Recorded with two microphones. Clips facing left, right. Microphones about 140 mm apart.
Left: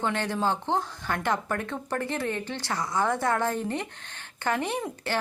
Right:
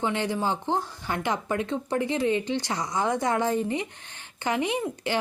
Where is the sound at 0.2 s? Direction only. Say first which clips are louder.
Even; 15° right (ahead or behind).